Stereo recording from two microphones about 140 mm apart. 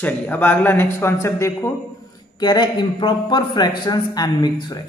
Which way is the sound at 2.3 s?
30° left (ahead or behind).